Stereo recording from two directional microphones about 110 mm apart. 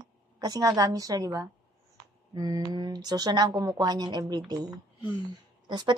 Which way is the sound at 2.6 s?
40° right (ahead or behind).